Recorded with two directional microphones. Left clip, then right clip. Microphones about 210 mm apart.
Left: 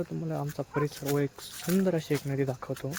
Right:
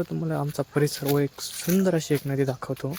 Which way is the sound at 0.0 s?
30° right (ahead or behind).